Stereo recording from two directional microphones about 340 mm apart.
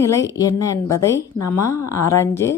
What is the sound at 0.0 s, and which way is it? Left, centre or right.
A woman's voice, centre.